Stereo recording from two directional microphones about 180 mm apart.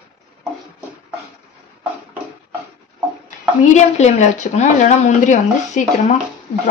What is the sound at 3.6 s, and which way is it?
Speech, 40° left (ahead or behind).